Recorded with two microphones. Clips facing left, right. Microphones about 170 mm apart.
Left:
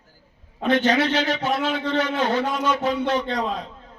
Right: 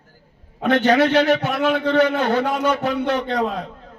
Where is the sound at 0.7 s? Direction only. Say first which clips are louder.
Right 4 dB; 60° right (ahead or behind).